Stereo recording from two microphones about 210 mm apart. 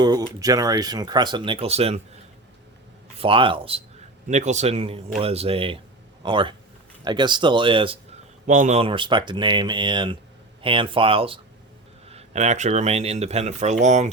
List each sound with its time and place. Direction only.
0.0 s speech: 20° right (ahead or behind)
3.2 s speech: 25° right (ahead or behind)
8.4 s speech: 35° right (ahead or behind)